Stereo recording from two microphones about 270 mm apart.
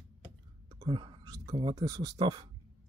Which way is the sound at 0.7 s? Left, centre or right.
Centre.